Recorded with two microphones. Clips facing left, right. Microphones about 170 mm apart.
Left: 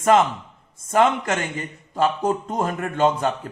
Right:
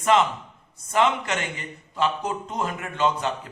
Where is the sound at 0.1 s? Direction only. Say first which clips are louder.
Left 3 dB; 45° left (ahead or behind).